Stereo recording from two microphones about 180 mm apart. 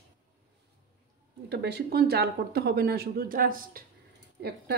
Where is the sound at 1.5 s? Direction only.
70° right (ahead or behind); by 3.8 s 50° right (ahead or behind).